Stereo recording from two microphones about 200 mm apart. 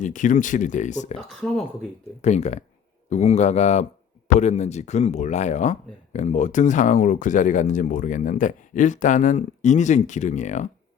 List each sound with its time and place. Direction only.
0.0 s speech: 40° left (ahead or behind)
1.4 s speech: 5° left (ahead or behind)
2.2 s speech: 35° left (ahead or behind)